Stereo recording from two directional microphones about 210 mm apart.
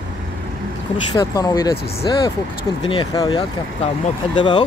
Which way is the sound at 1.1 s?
20° left (ahead or behind).